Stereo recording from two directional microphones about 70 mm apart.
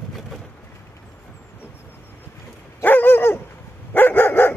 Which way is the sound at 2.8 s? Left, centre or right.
Left.